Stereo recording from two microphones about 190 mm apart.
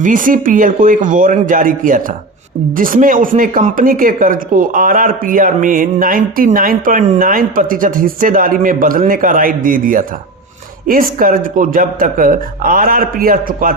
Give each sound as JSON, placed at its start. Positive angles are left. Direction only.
{"t": 0.0, "sound": "speech", "side_deg": -45}